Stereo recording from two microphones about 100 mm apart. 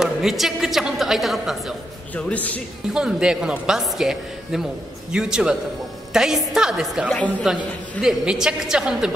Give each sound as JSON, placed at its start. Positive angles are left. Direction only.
{"t": 0.0, "sound": "a woman's voice", "side_deg": -5}
{"t": 2.1, "sound": "a man's voice", "side_deg": 15}
{"t": 2.9, "sound": "a woman's voice", "side_deg": -10}